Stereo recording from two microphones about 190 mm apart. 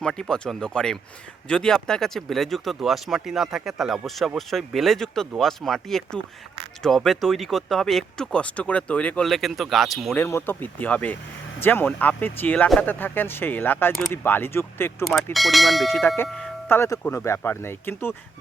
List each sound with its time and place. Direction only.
0.0 s speech: 5° left (ahead or behind)
10.2 s speech: 10° left (ahead or behind)
15.0 s speech: centre (ahead or behind)
16.0 s speech: 10° left (ahead or behind)